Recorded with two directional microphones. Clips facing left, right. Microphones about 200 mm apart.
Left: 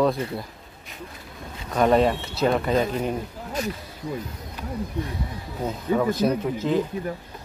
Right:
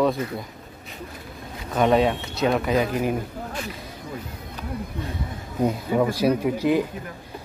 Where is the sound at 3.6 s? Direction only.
40° left (ahead or behind).